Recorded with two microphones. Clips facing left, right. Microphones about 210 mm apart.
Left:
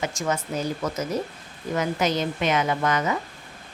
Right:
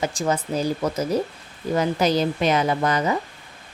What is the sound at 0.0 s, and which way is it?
Speech, 30° right (ahead or behind).